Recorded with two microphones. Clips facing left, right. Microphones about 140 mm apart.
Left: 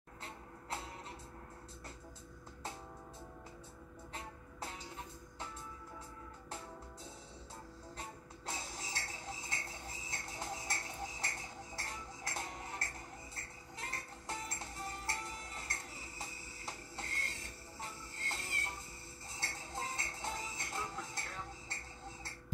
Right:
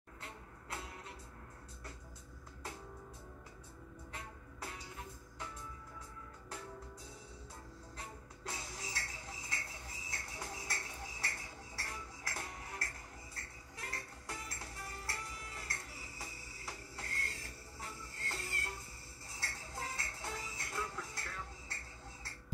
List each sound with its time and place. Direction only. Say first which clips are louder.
8.0 s music: right 1 dB; 25° left (ahead or behind)
17.7 s train: left 1 dB; 25° left (ahead or behind)
19.3 s music: left 2 dB; 25° left (ahead or behind)